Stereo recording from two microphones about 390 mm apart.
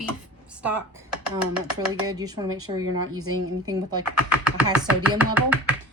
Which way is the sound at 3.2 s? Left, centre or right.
Right.